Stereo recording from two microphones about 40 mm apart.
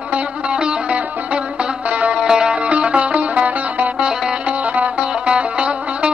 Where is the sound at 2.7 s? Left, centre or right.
Right.